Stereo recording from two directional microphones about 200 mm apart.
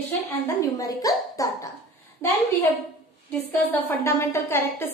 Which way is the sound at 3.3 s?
10° left (ahead or behind).